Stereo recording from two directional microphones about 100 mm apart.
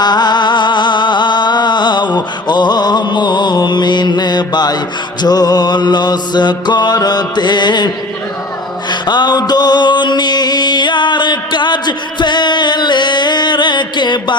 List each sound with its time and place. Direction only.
0.0 s music: 45° left (ahead or behind)
8.9 s music: 50° left (ahead or behind)